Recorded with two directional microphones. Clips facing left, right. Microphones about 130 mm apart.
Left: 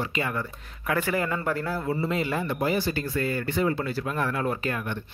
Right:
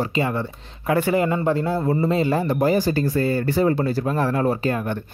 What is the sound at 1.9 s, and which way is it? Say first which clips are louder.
Speech: right 7 dB; 35° right (ahead or behind).